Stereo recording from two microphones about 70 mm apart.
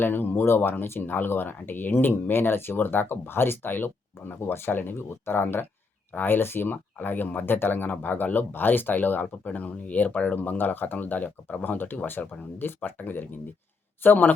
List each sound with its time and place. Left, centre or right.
0.0 s speech: left